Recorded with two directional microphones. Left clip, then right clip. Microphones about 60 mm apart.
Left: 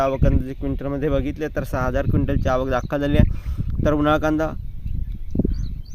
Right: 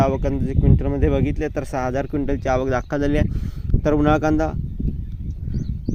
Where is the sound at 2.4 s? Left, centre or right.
Right.